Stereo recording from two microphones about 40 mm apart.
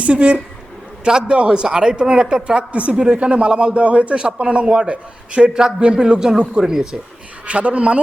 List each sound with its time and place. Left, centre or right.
0.0 s a man's voice: right; by 6.8 s centre
7.4 s speech: right